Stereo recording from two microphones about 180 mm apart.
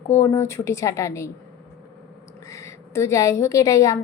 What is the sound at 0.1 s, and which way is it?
A woman's voice, 15° left (ahead or behind).